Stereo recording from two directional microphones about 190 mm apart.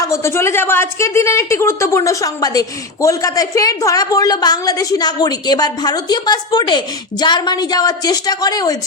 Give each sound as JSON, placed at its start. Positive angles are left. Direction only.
{"t": 0.0, "sound": "a woman's voice", "side_deg": 15}